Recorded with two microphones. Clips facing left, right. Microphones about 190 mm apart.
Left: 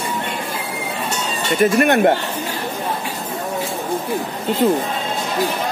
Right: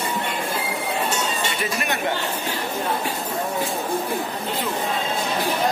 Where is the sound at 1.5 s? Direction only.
50° left (ahead or behind).